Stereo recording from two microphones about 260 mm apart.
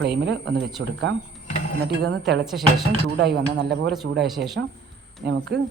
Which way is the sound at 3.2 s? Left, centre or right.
Right.